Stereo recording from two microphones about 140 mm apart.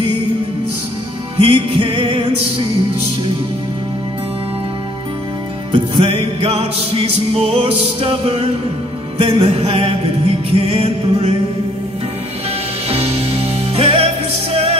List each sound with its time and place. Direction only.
1.4 s music: 40° right (ahead or behind)
5.7 s music: 40° right (ahead or behind)
12.9 s music: 45° right (ahead or behind)